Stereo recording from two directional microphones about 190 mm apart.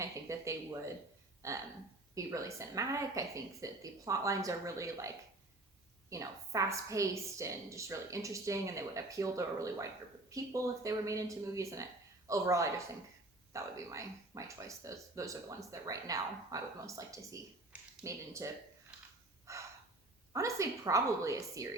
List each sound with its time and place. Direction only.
0.0 s a woman's voice: 15° right (ahead or behind)
17.7 s a sound: 15° right (ahead or behind)
19.5 s breathing: 15° right (ahead or behind)
20.3 s a woman's voice: 15° right (ahead or behind)